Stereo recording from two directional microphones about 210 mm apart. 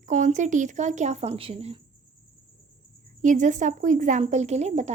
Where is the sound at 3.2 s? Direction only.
35° right (ahead or behind).